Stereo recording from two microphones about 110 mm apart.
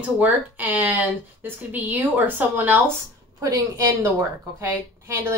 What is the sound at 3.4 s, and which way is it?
A woman's voice, 30° right (ahead or behind).